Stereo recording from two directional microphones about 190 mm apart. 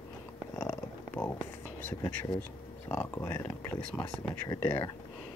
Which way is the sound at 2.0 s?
20° left (ahead or behind).